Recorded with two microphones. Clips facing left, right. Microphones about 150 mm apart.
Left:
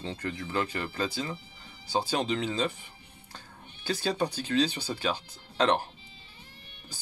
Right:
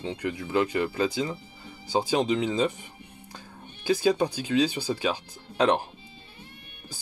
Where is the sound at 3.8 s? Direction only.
10° right (ahead or behind).